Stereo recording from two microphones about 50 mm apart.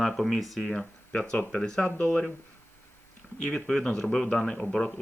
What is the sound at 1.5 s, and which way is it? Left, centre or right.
Speech, centre.